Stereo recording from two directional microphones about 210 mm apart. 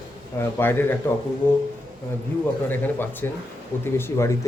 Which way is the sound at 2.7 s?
10° left (ahead or behind).